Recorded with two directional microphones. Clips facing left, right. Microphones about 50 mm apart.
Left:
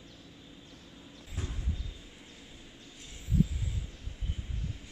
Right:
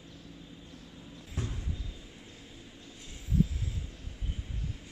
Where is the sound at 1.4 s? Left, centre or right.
Right.